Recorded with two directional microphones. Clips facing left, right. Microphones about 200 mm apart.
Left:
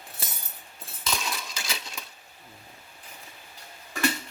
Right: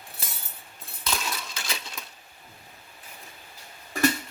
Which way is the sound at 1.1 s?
Centre (ahead or behind).